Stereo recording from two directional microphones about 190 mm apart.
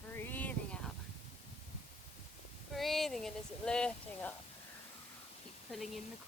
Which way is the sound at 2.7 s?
Centre (ahead or behind).